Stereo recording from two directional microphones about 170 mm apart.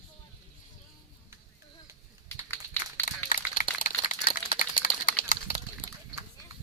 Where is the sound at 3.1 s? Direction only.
50° left (ahead or behind).